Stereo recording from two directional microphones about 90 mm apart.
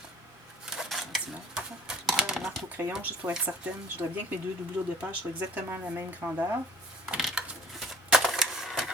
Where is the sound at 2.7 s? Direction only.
20° right (ahead or behind).